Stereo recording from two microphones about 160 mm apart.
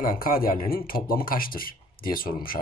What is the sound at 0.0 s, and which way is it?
Speech, 60° left (ahead or behind).